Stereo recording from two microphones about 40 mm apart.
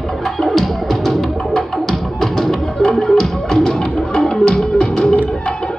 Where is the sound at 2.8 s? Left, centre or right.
Centre.